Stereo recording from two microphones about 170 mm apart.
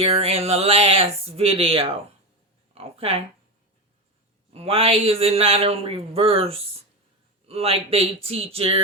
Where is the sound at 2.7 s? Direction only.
35° right (ahead or behind).